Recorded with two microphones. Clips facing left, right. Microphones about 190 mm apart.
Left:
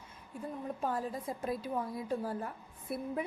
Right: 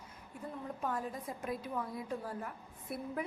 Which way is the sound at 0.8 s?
30° left (ahead or behind).